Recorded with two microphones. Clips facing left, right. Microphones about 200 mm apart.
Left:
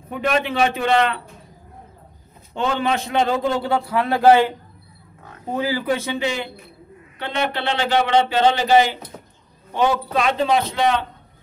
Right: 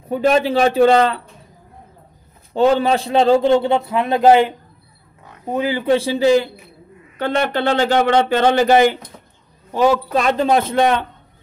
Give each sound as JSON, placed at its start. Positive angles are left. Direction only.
{"t": 0.1, "sound": "speech", "side_deg": -35}
{"t": 2.5, "sound": "a man's voice", "side_deg": -35}
{"t": 9.7, "sound": "speech", "side_deg": -40}